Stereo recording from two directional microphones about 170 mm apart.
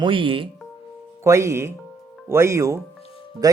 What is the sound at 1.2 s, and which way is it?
Speech, 15° right (ahead or behind).